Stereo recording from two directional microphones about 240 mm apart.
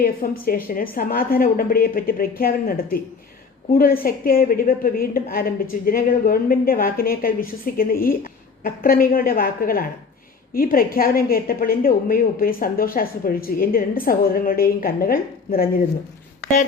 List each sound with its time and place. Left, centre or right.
0.0 s a woman's voice: left